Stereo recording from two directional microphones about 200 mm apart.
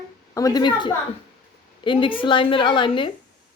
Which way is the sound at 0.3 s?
20° left (ahead or behind).